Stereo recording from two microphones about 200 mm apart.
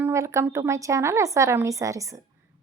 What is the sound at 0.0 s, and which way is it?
A woman's voice, 15° right (ahead or behind).